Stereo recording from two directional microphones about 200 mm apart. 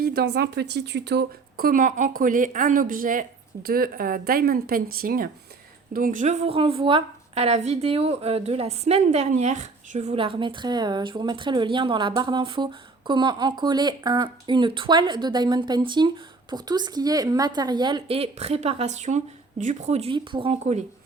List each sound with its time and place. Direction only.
0.0 s a woman's voice: 50° right (ahead or behind); by 20.8 s 30° right (ahead or behind)